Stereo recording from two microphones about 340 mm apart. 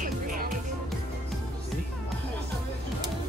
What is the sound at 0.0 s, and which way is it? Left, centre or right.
Music, right.